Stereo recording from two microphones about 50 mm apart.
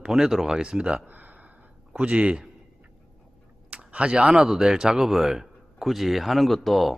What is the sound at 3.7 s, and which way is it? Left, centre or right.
Speech, right.